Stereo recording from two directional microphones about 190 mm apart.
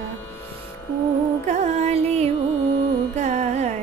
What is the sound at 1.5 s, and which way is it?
Music, 35° right (ahead or behind).